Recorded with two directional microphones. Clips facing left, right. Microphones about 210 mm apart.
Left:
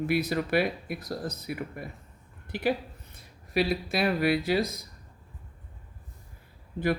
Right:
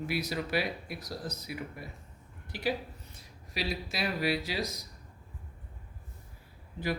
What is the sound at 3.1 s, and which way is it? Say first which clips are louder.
Speech: left 13 dB; 55° left (ahead or behind).